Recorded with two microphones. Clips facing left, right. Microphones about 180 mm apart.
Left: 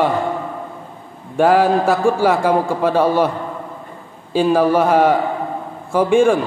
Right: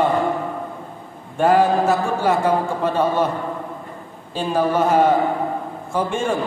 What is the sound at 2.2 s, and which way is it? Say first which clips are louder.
A man's voice: left 3 dB; 10° left (ahead or behind).